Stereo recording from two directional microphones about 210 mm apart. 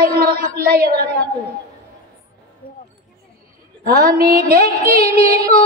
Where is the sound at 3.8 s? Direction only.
45° right (ahead or behind).